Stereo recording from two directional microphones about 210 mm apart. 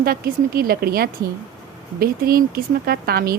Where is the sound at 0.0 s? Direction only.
45° right (ahead or behind).